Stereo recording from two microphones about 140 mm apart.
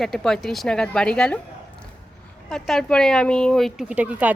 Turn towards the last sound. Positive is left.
turn(degrees=-10)  # may be behind; listen again after turning